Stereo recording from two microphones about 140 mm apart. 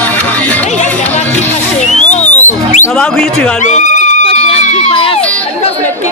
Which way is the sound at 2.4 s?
60° left (ahead or behind).